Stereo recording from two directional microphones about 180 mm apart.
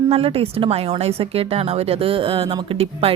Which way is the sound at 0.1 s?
35° right (ahead or behind).